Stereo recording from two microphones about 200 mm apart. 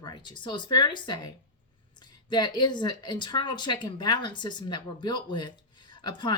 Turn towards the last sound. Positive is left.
turn(degrees=20)  # may be behind; listen again after turning